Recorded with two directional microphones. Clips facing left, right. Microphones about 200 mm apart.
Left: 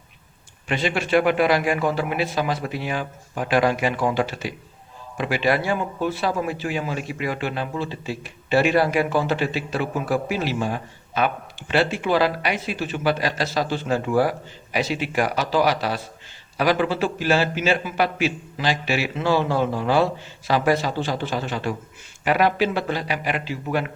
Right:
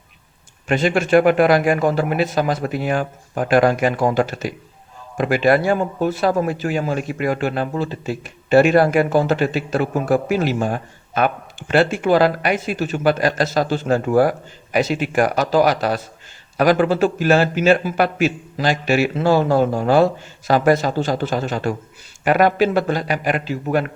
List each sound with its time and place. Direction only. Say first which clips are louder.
0.7 s speech: right 6 dB; 45° right (ahead or behind)